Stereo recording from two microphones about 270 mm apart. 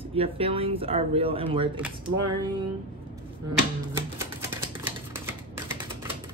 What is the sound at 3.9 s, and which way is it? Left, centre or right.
Music, centre.